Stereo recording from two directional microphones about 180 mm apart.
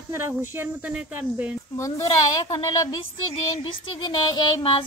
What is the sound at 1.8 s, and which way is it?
A child's voice, 20° left (ahead or behind).